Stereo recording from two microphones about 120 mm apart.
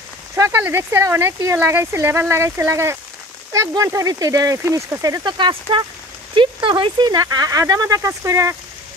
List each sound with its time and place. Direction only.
0.4 s speech: 20° right (ahead or behind)